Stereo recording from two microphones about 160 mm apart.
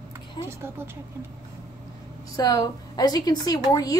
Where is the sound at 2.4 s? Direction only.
25° left (ahead or behind).